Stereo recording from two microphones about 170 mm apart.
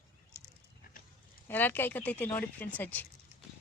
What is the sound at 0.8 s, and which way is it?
Pig, 55° left (ahead or behind).